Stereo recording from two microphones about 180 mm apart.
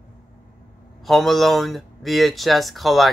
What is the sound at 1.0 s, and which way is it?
Speech, centre (ahead or behind).